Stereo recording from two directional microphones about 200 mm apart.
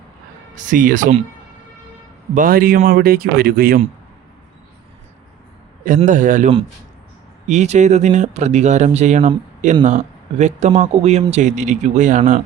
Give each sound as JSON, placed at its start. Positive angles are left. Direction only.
{"t": 0.5, "sound": "speech", "side_deg": -40}
{"t": 2.3, "sound": "a man's voice", "side_deg": -45}
{"t": 6.0, "sound": "speech", "side_deg": -40}